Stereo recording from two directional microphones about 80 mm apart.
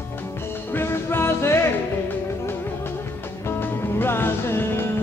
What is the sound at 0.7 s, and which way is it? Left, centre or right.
Music, left.